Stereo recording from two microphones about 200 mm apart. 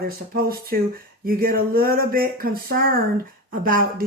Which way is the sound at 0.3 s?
50° right (ahead or behind).